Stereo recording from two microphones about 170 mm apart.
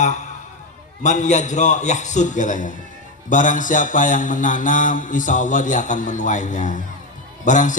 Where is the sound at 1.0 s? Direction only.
45° left (ahead or behind).